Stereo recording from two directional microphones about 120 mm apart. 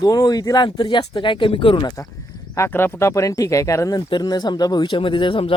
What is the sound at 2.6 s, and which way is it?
Speech, 20° left (ahead or behind).